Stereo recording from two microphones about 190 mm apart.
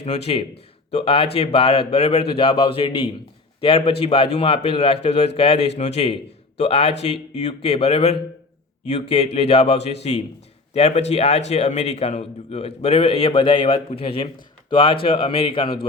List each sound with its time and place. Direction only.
0.0 s a man's voice: 35° left (ahead or behind)